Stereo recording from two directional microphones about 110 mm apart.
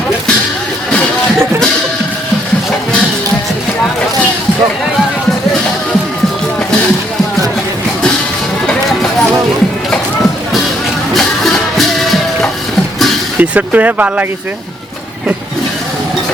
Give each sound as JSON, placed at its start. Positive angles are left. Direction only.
{"t": 11.1, "sound": "music", "side_deg": 5}
{"t": 13.4, "sound": "speech", "side_deg": -15}